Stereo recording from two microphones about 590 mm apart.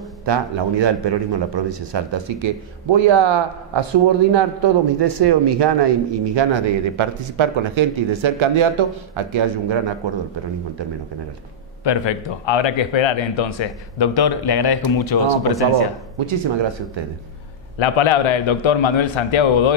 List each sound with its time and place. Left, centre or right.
0.2 s a man's voice: right
11.8 s speech: left
16.2 s a man's voice: right
17.7 s speech: left